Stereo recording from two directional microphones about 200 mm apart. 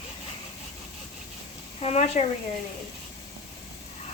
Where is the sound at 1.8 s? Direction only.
35° left (ahead or behind).